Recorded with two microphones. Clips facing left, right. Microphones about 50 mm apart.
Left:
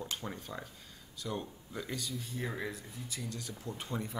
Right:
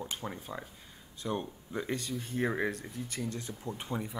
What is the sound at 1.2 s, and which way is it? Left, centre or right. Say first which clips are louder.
Speech: right 4 dB; right.